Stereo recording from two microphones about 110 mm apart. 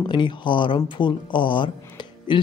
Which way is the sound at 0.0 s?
45° left (ahead or behind).